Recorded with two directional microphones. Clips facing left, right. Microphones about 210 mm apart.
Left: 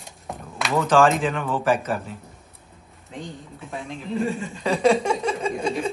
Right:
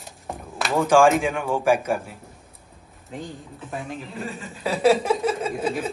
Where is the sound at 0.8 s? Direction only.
10° right (ahead or behind).